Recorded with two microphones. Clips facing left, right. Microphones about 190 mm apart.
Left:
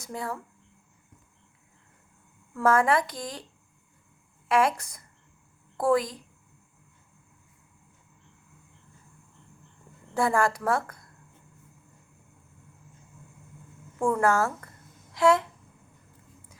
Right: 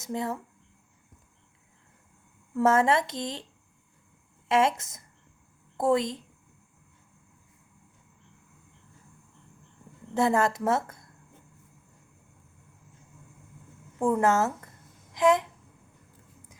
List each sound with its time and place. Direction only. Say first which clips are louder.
0.0 s a woman's voice: right 3 dB; 20° right (ahead or behind)
2.6 s a woman's voice: even; 25° right (ahead or behind)
4.4 s a woman's voice: even; 25° right (ahead or behind)
10.2 s a woman's voice: right 1 dB; 20° right (ahead or behind)
14.0 s a woman's voice: even; 20° right (ahead or behind)